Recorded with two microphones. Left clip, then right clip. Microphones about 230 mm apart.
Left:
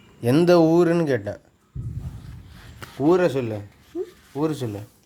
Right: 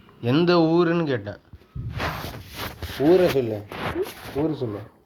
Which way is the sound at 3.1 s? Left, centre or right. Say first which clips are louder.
Right 2 dB; left.